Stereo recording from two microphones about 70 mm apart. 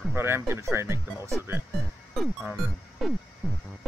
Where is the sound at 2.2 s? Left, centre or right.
Centre.